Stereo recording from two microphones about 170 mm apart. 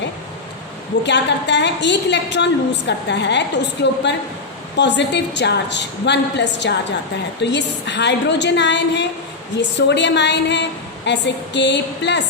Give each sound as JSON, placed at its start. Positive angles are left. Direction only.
{"t": 1.0, "sound": "a woman's voice", "side_deg": 90}